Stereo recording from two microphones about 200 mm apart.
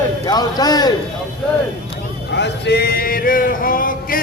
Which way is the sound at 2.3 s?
60° left (ahead or behind).